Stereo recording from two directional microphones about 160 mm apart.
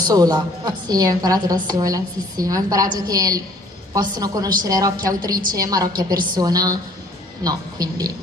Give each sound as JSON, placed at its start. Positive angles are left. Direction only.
{"t": 0.0, "sound": "a woman's voice", "side_deg": -25}